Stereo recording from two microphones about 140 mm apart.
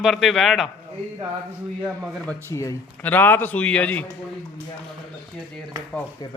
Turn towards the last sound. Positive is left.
turn(degrees=-30)  # may be behind; listen again after turning